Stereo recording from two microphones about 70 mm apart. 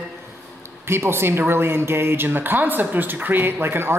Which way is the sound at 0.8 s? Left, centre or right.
Right.